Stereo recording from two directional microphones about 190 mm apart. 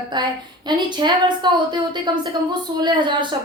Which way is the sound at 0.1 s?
25° right (ahead or behind).